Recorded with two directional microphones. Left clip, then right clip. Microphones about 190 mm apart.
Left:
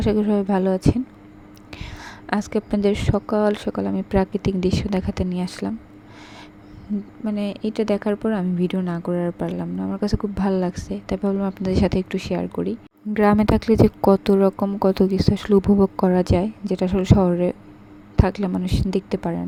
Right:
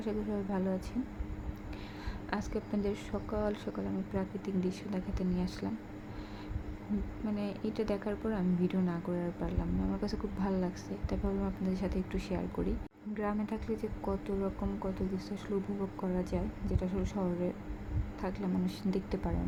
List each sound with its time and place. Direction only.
0.0 s a woman's voice: 50° left (ahead or behind)
7.3 s a woman's voice: 40° left (ahead or behind)
13.1 s a woman's voice: 60° left (ahead or behind); by 19.4 s 40° left (ahead or behind)